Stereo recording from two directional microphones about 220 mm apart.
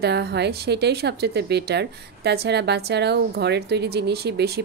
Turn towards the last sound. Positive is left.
turn(degrees=-45)  # may be behind; listen again after turning